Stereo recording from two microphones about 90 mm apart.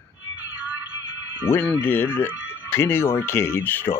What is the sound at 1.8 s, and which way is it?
Speech, 25° left (ahead or behind).